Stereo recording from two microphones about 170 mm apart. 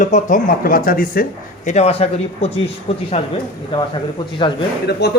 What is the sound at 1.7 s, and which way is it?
Speech, 35° left (ahead or behind).